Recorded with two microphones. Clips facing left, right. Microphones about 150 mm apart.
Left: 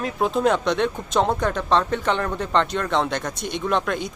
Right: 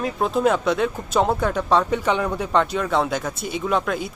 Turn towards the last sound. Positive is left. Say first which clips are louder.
# right 1 dB
turn(degrees=0)  # may be behind; listen again after turning